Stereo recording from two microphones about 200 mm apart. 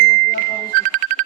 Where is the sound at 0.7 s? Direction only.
40° right (ahead or behind).